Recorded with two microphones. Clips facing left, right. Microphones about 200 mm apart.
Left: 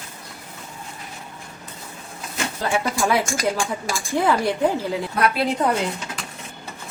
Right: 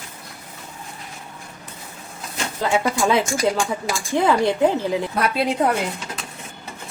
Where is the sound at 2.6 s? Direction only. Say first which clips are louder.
Right 3 dB; 20° right (ahead or behind).